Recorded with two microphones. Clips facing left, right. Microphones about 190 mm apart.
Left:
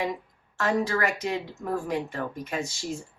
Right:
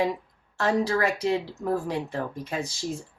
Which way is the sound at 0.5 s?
35° right (ahead or behind).